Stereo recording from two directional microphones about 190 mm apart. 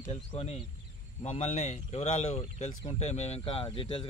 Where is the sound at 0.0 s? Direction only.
30° left (ahead or behind).